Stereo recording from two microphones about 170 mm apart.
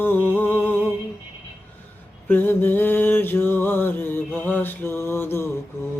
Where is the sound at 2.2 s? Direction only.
10° left (ahead or behind).